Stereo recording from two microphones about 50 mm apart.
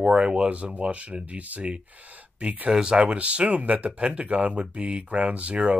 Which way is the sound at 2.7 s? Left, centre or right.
Centre.